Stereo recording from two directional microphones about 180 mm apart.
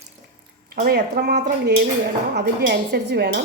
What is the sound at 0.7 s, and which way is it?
Speech, 55° right (ahead or behind).